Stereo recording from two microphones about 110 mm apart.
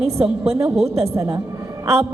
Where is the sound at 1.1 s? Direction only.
25° right (ahead or behind).